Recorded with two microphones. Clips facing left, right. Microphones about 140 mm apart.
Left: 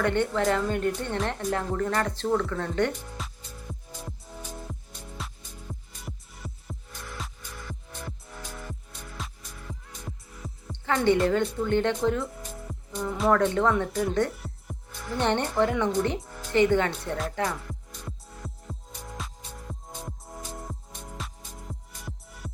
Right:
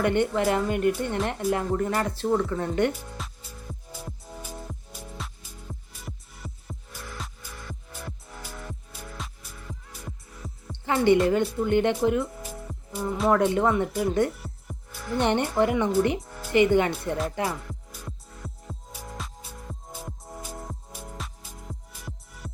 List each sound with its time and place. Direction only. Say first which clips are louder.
0.0 s speech: right 2 dB; 15° right (ahead or behind)
3.2 s music: even; centre (ahead or behind)
11.3 s speech: right 2 dB; 10° right (ahead or behind)
12.4 s music: right 1 dB; 5° right (ahead or behind)
13.3 s speech: right 1 dB; 10° right (ahead or behind)
17.7 s music: even; centre (ahead or behind)